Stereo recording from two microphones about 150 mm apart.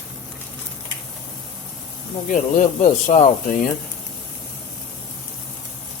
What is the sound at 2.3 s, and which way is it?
Speech, 60° left (ahead or behind).